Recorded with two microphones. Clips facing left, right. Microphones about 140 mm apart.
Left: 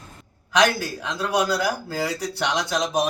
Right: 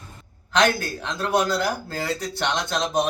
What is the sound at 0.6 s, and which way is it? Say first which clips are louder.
A man's voice: even; 10° left (ahead or behind).